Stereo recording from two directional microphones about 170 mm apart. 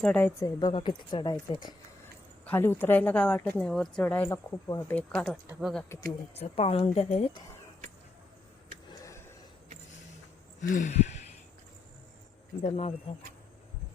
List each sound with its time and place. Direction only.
0.0 s a woman's voice: 10° left (ahead or behind); by 1.7 s 25° left (ahead or behind)
2.4 s speech: 10° left (ahead or behind)
6.4 s speech: 35° left (ahead or behind)
9.0 s gasp: 15° left (ahead or behind)
10.6 s a sound: 50° left (ahead or behind)
12.6 s speech: 40° left (ahead or behind)